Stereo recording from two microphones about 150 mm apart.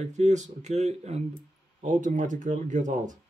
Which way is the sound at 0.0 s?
50° right (ahead or behind).